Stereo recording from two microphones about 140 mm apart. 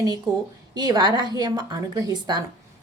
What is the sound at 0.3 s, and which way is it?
Speech, 25° right (ahead or behind).